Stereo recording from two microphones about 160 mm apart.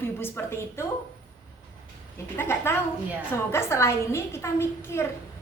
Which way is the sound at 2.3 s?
15° left (ahead or behind).